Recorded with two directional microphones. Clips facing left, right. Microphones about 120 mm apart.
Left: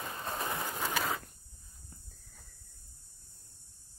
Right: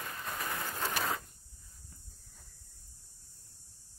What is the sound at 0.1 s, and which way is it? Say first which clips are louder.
Bird: left 3 dB; 30° left (ahead or behind).